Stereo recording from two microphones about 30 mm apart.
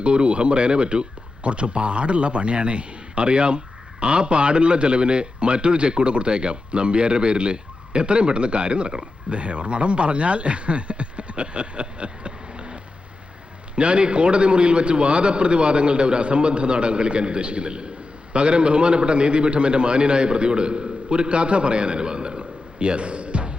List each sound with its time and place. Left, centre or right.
0.0 s a man's voice: right
1.4 s a man's voice: right
9.3 s a man's voice: right